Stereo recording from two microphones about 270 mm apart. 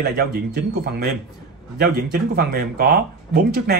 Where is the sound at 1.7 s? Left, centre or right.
Right.